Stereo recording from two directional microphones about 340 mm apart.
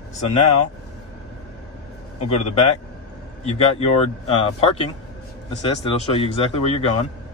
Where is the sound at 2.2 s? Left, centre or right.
Centre.